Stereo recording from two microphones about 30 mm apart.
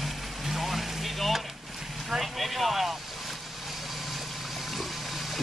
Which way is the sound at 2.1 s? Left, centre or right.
Centre.